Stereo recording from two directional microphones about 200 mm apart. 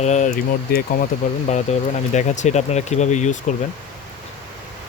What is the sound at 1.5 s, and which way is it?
Speech, 35° left (ahead or behind).